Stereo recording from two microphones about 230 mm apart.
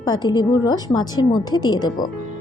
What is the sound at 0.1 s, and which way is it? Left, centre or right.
A woman's voice, centre.